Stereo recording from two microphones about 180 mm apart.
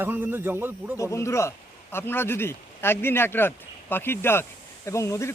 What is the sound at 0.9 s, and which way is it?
Speech, 15° left (ahead or behind).